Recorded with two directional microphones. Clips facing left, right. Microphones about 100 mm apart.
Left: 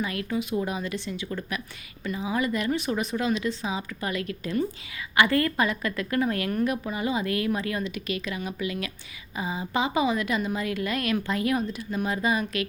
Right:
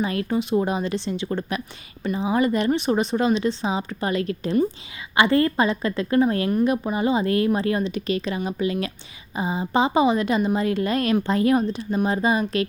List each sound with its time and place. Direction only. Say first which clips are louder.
0.0 s a woman's voice: right 5 dB; 35° right (ahead or behind)